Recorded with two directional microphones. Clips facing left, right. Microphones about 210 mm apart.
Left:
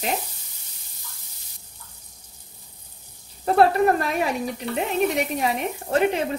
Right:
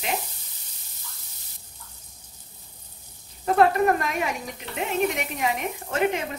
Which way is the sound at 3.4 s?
35° left (ahead or behind).